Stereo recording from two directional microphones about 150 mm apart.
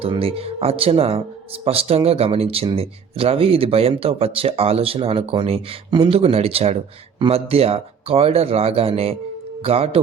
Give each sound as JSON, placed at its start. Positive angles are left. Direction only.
{"t": 0.0, "sound": "speech", "side_deg": -40}